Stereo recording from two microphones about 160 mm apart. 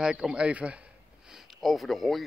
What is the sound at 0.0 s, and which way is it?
Speech, 5° right (ahead or behind).